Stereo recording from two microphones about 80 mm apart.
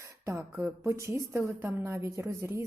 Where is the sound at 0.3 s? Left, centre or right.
Right.